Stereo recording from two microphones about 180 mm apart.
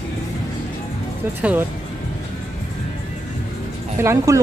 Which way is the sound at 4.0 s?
15° right (ahead or behind).